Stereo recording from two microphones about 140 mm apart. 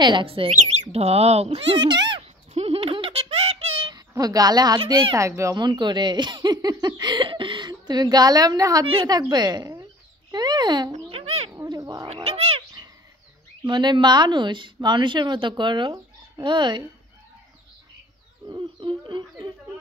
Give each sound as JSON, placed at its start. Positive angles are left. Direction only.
{"t": 0.0, "sound": "speech", "side_deg": -35}
{"t": 0.5, "sound": "speech", "side_deg": -60}
{"t": 2.5, "sound": "a sound", "side_deg": -45}
{"t": 3.9, "sound": "a woman's voice", "side_deg": -25}
{"t": 5.7, "sound": "a woman's voice", "side_deg": -35}
{"t": 10.3, "sound": "a sound", "side_deg": -30}
{"t": 11.5, "sound": "bird", "side_deg": -25}
{"t": 12.1, "sound": "cat", "side_deg": -45}
{"t": 13.7, "sound": "speech", "side_deg": -30}
{"t": 18.5, "sound": "bird", "side_deg": -30}